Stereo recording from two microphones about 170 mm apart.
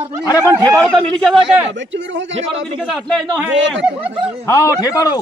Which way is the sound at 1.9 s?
90° right.